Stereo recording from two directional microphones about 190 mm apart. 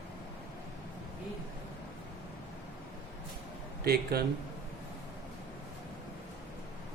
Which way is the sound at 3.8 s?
55° right (ahead or behind).